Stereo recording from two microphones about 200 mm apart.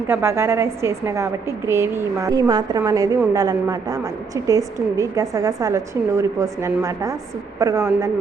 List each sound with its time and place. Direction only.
0.1 s a woman's voice: 10° right (ahead or behind)